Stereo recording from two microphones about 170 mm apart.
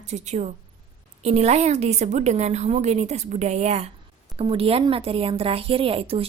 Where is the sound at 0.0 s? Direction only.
40° right (ahead or behind).